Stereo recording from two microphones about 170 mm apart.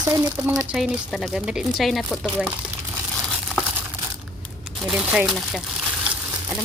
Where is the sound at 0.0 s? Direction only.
20° right (ahead or behind).